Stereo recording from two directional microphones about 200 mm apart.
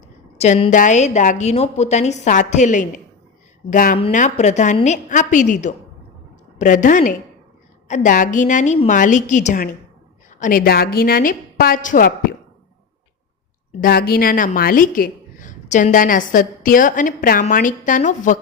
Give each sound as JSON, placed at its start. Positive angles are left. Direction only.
{"t": 0.3, "sound": "a woman's voice", "side_deg": 35}
{"t": 13.8, "sound": "a woman's voice", "side_deg": 45}